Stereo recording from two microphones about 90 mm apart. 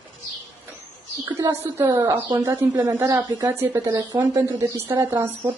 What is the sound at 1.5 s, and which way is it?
Speech, 25° right (ahead or behind).